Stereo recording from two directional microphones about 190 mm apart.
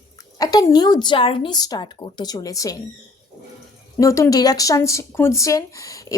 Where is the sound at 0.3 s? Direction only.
20° left (ahead or behind).